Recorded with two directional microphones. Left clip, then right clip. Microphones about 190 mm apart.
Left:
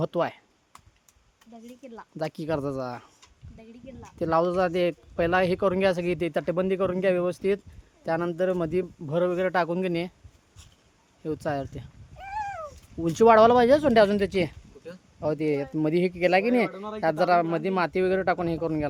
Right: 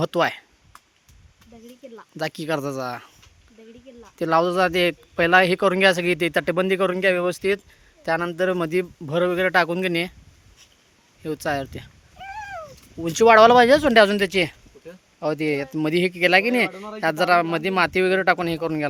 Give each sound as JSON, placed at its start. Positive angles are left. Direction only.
{"t": 0.0, "sound": "speech", "side_deg": 0}
{"t": 2.1, "sound": "speech", "side_deg": 5}
{"t": 4.2, "sound": "speech", "side_deg": 5}
{"t": 11.2, "sound": "speech", "side_deg": 5}
{"t": 12.3, "sound": "a sound", "side_deg": 60}
{"t": 13.0, "sound": "speech", "side_deg": -5}